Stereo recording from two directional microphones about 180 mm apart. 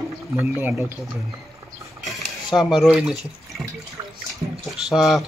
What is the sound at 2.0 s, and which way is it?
Water, centre (ahead or behind).